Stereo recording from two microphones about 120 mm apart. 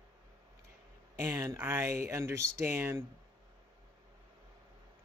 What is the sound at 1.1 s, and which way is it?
Speech, 25° right (ahead or behind).